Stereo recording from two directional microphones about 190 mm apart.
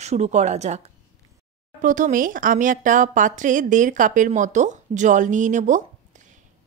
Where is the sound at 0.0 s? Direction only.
35° right (ahead or behind).